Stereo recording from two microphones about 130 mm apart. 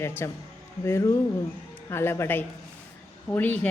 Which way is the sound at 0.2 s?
20° left (ahead or behind).